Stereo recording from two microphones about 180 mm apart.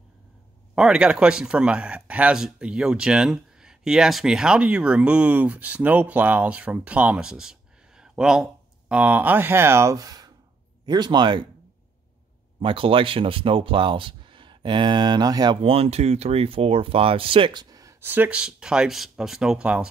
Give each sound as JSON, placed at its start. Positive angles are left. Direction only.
{"t": 0.7, "sound": "speech", "side_deg": -5}
{"t": 12.5, "sound": "speech", "side_deg": -30}